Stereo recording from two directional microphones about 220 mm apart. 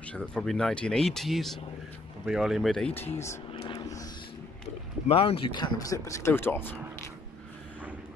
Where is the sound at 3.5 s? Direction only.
25° left (ahead or behind).